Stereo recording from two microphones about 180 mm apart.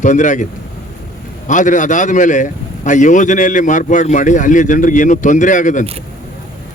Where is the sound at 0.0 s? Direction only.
45° left (ahead or behind).